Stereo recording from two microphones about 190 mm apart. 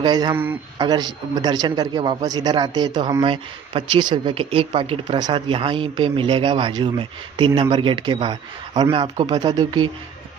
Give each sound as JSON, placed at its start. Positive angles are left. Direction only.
{"t": 0.0, "sound": "speech", "side_deg": -20}